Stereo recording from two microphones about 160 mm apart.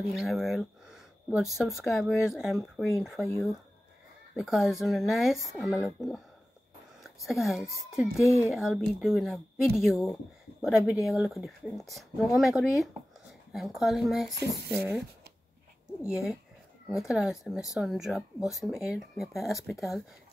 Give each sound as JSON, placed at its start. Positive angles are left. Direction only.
{"t": 0.2, "sound": "speech", "side_deg": 0}
{"t": 4.4, "sound": "speech", "side_deg": 0}
{"t": 14.3, "sound": "speech", "side_deg": -85}
{"t": 14.7, "sound": "speech", "side_deg": -10}
{"t": 16.1, "sound": "speech", "side_deg": -5}